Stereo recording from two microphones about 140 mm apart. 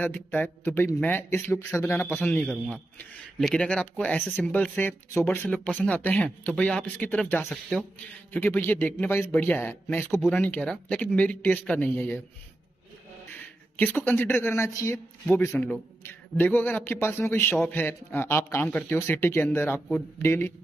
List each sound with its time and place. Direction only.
0.0 s speech: 10° left (ahead or behind)
13.3 s speech: 10° left (ahead or behind)